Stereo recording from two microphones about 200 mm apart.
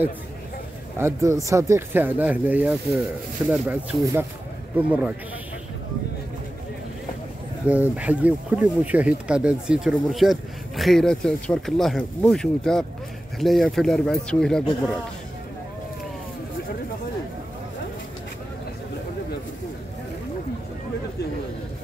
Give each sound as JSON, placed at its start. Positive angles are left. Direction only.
{"t": 0.9, "sound": "speech", "side_deg": -15}
{"t": 7.6, "sound": "speech", "side_deg": -5}